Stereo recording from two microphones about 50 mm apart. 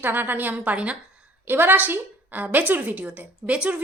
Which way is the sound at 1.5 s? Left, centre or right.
Right.